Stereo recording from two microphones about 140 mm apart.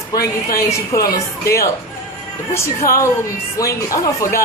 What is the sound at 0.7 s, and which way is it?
Speech, 20° left (ahead or behind).